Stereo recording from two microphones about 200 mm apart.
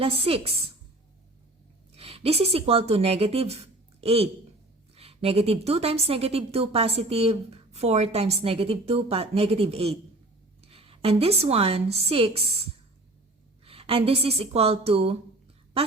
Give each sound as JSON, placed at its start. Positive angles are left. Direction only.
{"t": 0.0, "sound": "a woman's voice", "side_deg": -30}
{"t": 1.9, "sound": "a woman's voice", "side_deg": -30}
{"t": 13.7, "sound": "a woman's voice", "side_deg": -30}